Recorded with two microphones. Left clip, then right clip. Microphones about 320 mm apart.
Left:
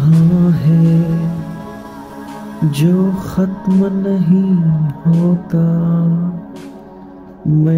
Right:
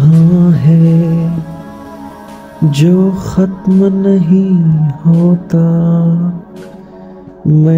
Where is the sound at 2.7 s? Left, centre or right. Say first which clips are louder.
Right 5 dB; centre.